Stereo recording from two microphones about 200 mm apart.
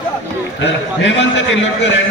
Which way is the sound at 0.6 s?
65° left (ahead or behind).